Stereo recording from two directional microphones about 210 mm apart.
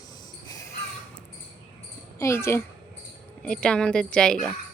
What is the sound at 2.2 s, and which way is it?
A woman's voice, 15° left (ahead or behind).